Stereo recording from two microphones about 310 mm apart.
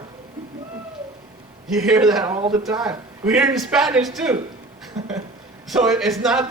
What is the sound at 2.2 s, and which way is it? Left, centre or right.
Speech, centre.